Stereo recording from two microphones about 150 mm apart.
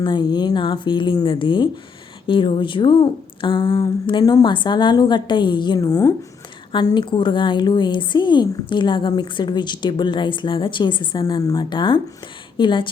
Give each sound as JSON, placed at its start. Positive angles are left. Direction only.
{"t": 0.0, "sound": "a woman's voice", "side_deg": 30}
{"t": 6.7, "sound": "a woman's voice", "side_deg": 30}